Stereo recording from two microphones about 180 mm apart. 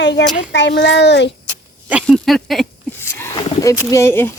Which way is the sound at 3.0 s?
10° left (ahead or behind).